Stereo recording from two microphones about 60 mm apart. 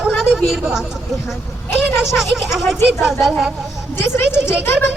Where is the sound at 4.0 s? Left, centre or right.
Left.